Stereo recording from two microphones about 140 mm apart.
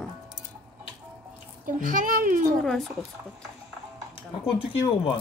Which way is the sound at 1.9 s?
80° right.